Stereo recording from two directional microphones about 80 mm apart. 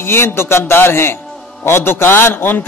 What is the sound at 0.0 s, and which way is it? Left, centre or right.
A man's voice, left.